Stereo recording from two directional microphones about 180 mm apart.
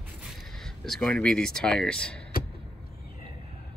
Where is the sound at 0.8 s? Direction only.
5° left (ahead or behind).